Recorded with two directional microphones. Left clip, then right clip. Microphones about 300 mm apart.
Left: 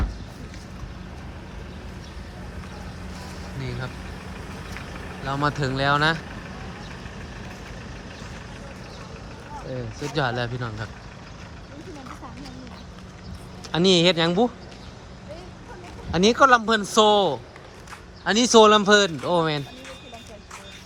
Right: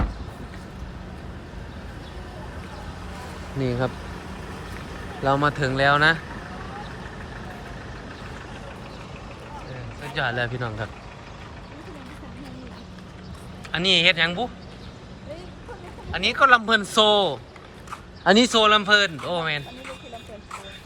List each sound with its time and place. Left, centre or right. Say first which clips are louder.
3.6 s speech: right 10 dB; centre
5.2 s a man's voice: right 4 dB; centre
10.2 s a man's voice: right 1 dB; centre
13.7 s a man's voice: even; centre
16.1 s a man's voice: left 1 dB; centre